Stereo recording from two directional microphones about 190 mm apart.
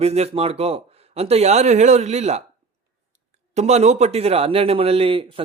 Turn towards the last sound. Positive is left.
turn(degrees=-30)  # may be behind; listen again after turning